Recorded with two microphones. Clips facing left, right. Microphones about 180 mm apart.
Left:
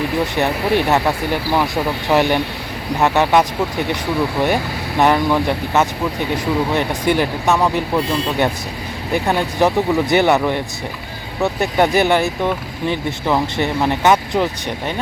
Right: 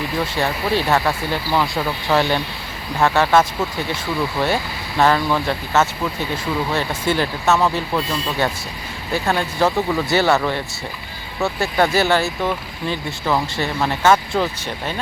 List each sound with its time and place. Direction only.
0.2 s speech: 20° left (ahead or behind)